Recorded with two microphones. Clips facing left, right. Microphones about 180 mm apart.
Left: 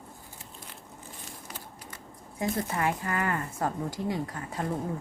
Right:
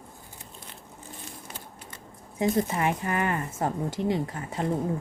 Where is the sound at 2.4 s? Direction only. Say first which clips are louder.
Right 4 dB; 20° right (ahead or behind).